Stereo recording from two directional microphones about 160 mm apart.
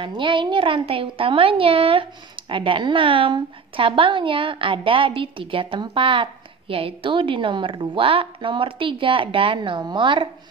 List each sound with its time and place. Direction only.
0.0 s a woman's voice: 30° right (ahead or behind)